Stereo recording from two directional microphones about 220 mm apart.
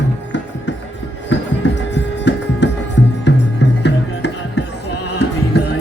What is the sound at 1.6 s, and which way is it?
Music, 50° left (ahead or behind).